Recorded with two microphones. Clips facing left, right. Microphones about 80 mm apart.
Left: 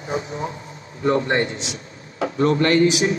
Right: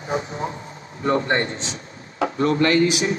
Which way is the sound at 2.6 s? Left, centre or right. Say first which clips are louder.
Left 1 dB; left.